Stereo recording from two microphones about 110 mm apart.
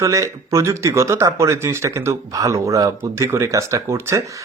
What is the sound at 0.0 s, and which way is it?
Speech, 30° right (ahead or behind).